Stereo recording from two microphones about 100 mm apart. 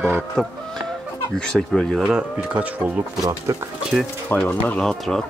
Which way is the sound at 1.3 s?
10° left (ahead or behind).